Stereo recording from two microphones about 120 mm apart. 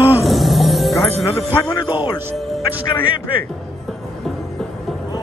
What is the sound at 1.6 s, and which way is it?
Speech, 35° left (ahead or behind).